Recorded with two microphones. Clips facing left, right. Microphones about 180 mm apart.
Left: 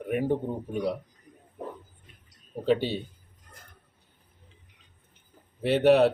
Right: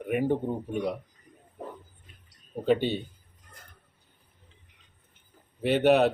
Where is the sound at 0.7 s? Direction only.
35° left (ahead or behind).